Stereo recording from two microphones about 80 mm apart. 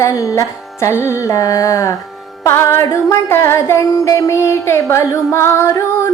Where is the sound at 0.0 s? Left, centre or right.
Left.